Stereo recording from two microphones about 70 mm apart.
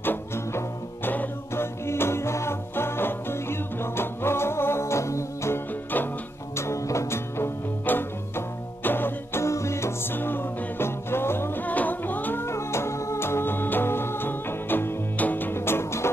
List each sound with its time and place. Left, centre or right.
0.0 s music: left
7.8 s music: left
12.4 s music: left